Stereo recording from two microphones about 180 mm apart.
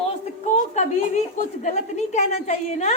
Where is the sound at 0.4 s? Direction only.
40° left (ahead or behind).